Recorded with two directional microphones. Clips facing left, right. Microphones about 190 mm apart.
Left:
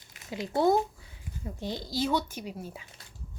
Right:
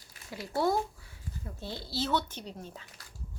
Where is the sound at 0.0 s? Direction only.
20° left (ahead or behind).